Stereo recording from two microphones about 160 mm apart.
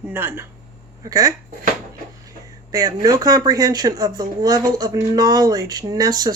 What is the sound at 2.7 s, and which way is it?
Speech, 25° right (ahead or behind).